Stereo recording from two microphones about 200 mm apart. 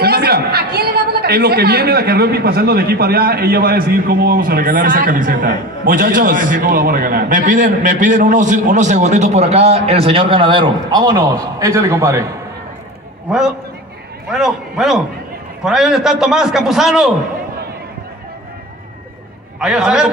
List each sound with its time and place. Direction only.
0.0 s a man's voice: 50° right (ahead or behind); by 12.3 s 15° right (ahead or behind)
13.3 s a man's voice: 5° right (ahead or behind)
19.6 s a man's voice: 5° right (ahead or behind)